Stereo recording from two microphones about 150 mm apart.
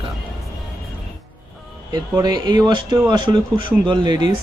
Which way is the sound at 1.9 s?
30° right (ahead or behind).